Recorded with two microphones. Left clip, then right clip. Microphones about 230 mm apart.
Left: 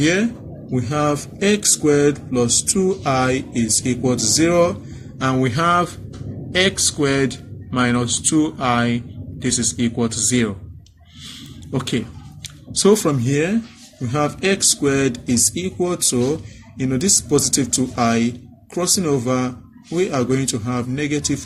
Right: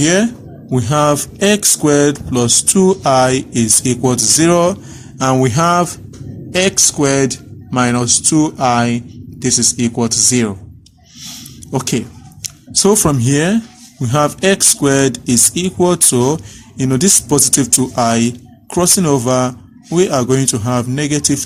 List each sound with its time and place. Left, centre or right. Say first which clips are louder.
0.0 s speech: right 5 dB; right
11.3 s a sound: right 6 dB; right
12.8 s speech: right 3 dB; right